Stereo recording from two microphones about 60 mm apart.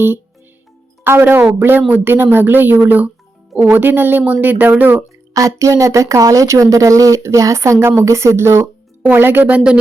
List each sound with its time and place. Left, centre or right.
1.0 s a woman's voice: right
5.3 s speech: right
9.0 s a woman's voice: right